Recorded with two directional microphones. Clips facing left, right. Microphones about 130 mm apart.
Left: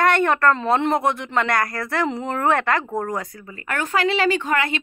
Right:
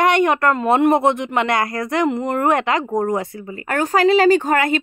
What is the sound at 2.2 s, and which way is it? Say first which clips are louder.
Speech: right 3 dB; 10° right (ahead or behind).